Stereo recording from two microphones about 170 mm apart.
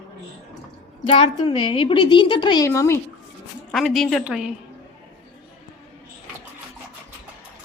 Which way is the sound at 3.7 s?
Centre (ahead or behind).